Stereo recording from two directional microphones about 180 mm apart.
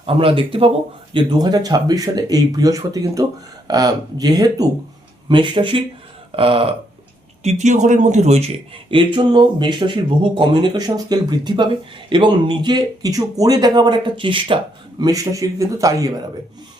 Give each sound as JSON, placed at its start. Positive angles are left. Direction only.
{"t": 0.0, "sound": "speech", "side_deg": -30}